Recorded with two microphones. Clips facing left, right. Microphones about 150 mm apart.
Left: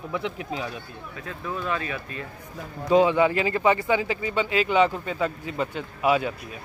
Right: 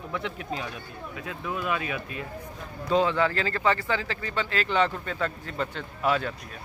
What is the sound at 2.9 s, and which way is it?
Speech, 15° left (ahead or behind).